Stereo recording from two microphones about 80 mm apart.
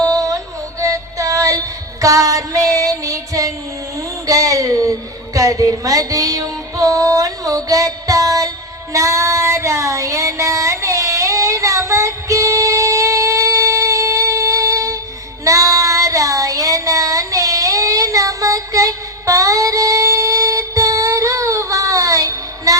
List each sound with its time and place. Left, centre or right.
0.0 s music: right
4.3 s a sound: right
8.9 s child singing: right